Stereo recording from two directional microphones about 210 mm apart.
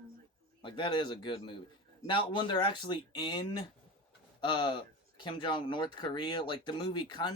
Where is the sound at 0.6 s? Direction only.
25° left (ahead or behind).